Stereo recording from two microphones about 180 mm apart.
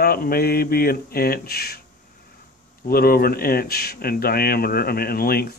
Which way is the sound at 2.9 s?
55° left (ahead or behind).